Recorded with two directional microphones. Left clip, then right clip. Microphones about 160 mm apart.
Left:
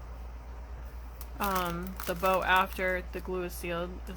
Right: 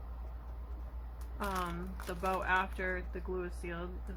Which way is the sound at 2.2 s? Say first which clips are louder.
Left 7 dB; 50° left (ahead or behind).